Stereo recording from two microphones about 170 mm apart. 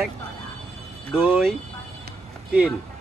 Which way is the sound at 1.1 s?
5° right (ahead or behind).